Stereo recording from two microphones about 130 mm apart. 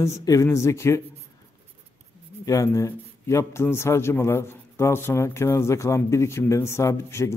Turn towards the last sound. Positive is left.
turn(degrees=20)  # may be behind; listen again after turning